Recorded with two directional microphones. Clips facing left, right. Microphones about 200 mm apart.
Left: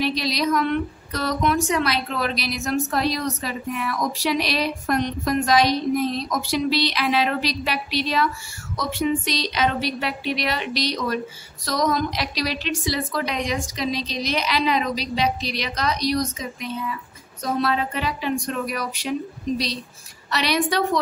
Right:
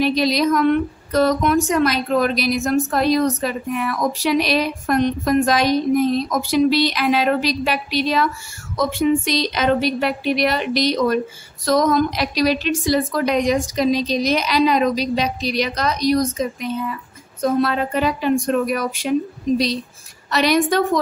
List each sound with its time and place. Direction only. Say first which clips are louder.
0.0 s a woman's voice: right 6 dB; 50° right (ahead or behind)